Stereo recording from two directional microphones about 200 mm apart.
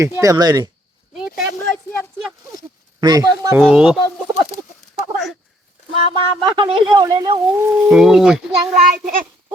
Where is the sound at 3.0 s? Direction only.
20° right (ahead or behind).